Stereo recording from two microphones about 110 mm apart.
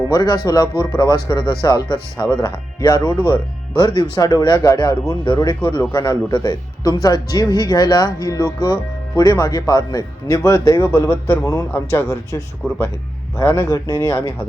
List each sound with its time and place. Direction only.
0.1 s speech: 35° left (ahead or behind)
12.6 s speech: centre (ahead or behind)
13.3 s speech: 25° left (ahead or behind)